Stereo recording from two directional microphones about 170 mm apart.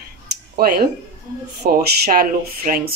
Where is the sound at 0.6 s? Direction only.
65° right (ahead or behind).